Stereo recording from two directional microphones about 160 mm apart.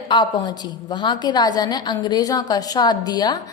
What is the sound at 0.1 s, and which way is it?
A woman's voice, 25° left (ahead or behind).